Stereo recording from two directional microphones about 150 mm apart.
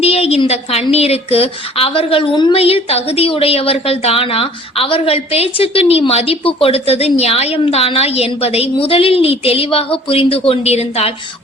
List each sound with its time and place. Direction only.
0.0 s a woman's voice: 45° left (ahead or behind)